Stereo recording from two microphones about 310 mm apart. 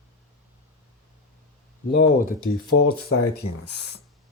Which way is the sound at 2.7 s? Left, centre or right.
Left.